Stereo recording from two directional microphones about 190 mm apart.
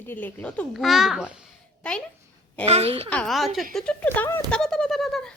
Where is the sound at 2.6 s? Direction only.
30° right (ahead or behind).